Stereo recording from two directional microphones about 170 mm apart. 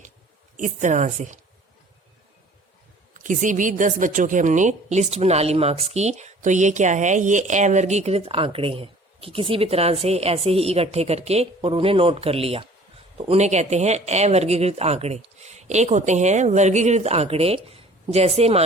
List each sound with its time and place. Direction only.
0.5 s a woman's voice: 45° right (ahead or behind)
3.2 s a woman's voice: 50° right (ahead or behind)